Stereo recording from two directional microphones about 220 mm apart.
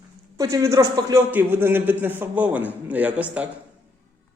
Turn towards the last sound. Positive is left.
turn(degrees=-5)  # may be behind; listen again after turning